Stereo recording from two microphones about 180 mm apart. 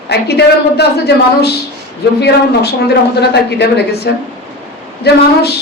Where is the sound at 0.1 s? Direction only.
65° left (ahead or behind).